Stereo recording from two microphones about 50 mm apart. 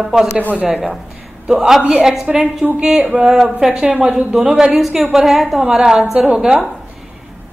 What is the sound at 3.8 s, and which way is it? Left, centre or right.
Speech, right.